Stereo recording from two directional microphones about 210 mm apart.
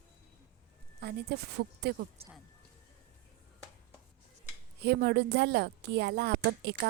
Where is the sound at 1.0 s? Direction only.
50° right (ahead or behind).